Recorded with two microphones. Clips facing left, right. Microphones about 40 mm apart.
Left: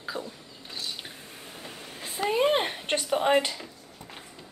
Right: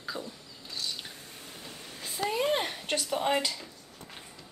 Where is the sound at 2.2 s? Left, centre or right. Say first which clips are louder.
Left 5 dB; left.